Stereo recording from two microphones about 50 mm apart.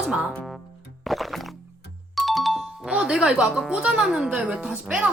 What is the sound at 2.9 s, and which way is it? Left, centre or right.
Speech, centre.